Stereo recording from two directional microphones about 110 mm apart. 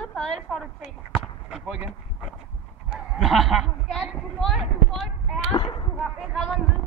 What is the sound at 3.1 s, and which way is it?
Speech, centre (ahead or behind).